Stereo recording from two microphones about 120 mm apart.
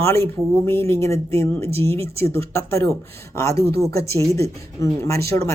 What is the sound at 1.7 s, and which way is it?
Speech, 55° right (ahead or behind).